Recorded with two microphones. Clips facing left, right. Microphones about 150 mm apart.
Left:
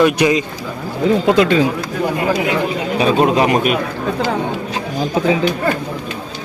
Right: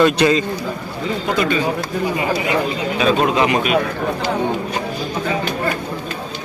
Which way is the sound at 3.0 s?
40° left (ahead or behind).